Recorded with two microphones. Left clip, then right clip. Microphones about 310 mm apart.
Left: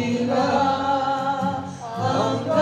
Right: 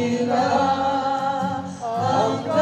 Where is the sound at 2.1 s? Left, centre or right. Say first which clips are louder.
Even; right.